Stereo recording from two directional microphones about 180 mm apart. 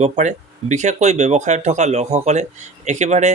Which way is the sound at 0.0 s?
40° right (ahead or behind).